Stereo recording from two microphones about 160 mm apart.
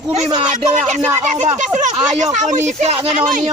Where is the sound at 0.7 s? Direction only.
45° right (ahead or behind).